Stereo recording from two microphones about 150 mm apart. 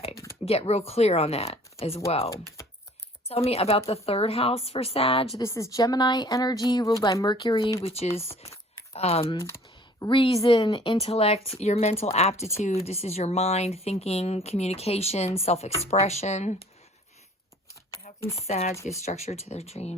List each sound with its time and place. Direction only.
0.4 s a woman's voice: 40° left (ahead or behind)
5.4 s a woman's voice: 20° left (ahead or behind); by 16.6 s 50° left (ahead or behind)
18.2 s speech: 20° left (ahead or behind)
18.4 s speech: 45° left (ahead or behind)